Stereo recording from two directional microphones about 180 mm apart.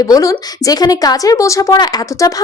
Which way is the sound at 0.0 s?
20° left (ahead or behind).